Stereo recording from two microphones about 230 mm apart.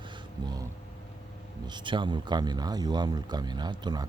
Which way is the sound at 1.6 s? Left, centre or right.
Centre.